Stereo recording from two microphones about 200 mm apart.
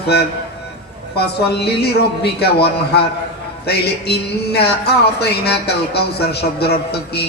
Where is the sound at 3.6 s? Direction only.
55° left (ahead or behind).